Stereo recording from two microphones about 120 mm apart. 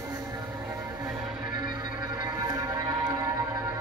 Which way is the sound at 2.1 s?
35° right (ahead or behind).